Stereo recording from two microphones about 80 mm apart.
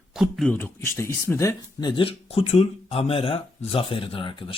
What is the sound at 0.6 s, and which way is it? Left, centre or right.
Speech, left.